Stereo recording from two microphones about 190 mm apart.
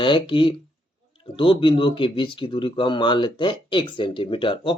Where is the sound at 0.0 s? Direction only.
25° left (ahead or behind).